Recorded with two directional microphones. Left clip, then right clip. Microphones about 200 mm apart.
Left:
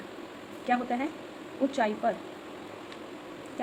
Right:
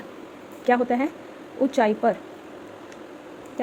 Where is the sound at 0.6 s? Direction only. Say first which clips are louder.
Right 8 dB; 45° right (ahead or behind).